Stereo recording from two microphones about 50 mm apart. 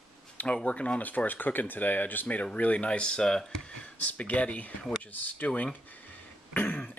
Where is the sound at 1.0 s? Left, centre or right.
Left; by 3.6 s centre.